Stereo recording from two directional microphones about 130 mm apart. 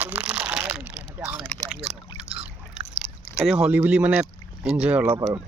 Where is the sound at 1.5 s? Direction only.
10° left (ahead or behind).